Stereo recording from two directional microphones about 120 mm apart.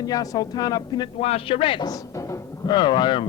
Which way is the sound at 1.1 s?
60° left (ahead or behind).